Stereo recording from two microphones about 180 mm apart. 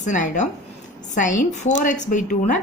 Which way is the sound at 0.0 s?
45° left (ahead or behind).